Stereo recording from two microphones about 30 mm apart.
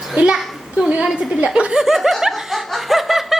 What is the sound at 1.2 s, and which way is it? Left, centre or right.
Speech, right.